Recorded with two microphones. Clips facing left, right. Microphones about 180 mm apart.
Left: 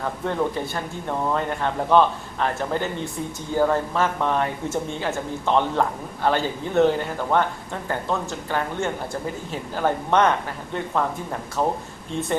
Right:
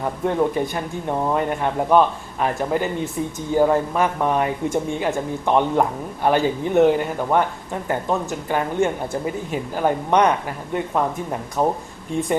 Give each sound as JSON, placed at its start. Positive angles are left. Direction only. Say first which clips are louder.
{"t": 0.0, "sound": "speech", "louder": "right 4 dB", "side_deg": -15}